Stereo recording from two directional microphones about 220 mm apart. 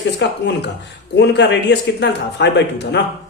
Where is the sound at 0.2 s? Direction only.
50° left (ahead or behind).